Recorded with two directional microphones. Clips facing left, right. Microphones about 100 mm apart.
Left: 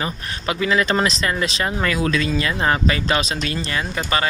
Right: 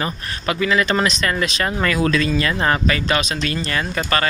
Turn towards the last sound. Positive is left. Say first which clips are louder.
# right 1 dB
turn(degrees=15)  # may be behind; listen again after turning